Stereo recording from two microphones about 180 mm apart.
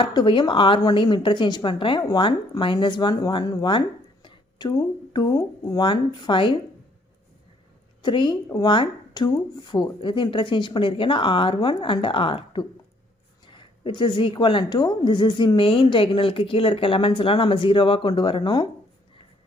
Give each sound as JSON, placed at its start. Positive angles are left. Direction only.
{"t": 0.0, "sound": "a woman's voice", "side_deg": 25}
{"t": 8.0, "sound": "a woman's voice", "side_deg": 25}